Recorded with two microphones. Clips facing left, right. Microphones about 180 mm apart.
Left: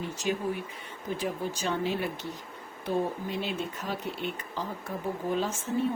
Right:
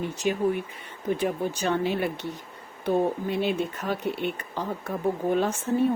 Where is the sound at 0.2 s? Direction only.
60° right (ahead or behind).